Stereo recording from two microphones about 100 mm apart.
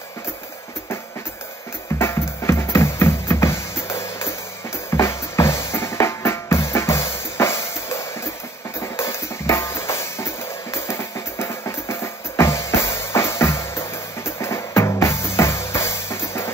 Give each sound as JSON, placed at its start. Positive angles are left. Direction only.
{"t": 2.0, "sound": "music", "side_deg": 25}
{"t": 4.9, "sound": "drum", "side_deg": 25}
{"t": 8.7, "sound": "music", "side_deg": 30}